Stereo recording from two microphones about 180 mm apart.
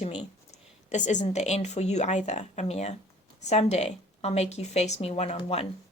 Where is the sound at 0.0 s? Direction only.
35° left (ahead or behind).